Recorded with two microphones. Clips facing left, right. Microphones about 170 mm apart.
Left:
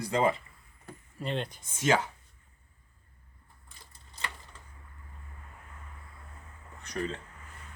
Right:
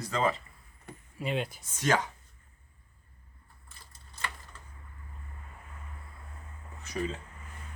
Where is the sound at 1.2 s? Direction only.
5° right (ahead or behind).